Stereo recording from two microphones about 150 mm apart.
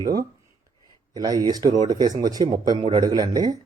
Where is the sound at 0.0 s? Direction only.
25° right (ahead or behind).